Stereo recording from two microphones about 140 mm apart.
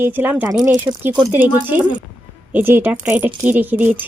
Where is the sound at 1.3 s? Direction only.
15° right (ahead or behind).